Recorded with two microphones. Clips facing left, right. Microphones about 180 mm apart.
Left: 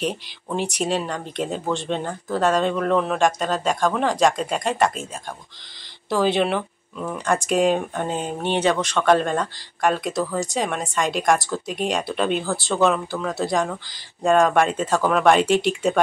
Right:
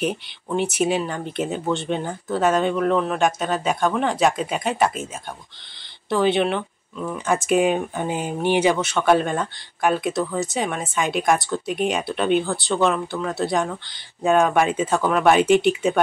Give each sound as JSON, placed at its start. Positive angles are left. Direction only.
{"t": 0.0, "sound": "speech", "side_deg": 0}
{"t": 6.0, "sound": "speech", "side_deg": 0}